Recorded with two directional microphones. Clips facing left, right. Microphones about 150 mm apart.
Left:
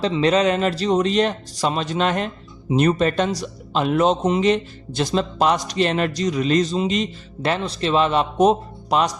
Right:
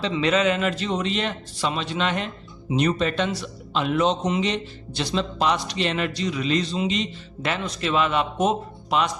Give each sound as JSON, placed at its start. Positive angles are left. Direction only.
{"t": 0.0, "sound": "a man's voice", "side_deg": 35}